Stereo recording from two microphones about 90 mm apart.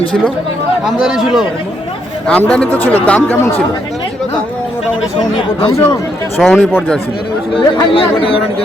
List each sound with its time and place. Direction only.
0.9 s a man's voice: 5° right (ahead or behind)
2.2 s speech: 15° left (ahead or behind)
6.4 s a man's voice: 5° left (ahead or behind)
7.5 s speech: 75° left (ahead or behind)